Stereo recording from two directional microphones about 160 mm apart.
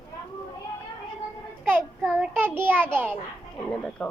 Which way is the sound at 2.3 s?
15° right (ahead or behind).